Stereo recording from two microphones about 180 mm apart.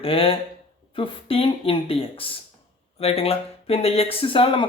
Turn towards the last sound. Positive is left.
turn(degrees=30)  # may be behind; listen again after turning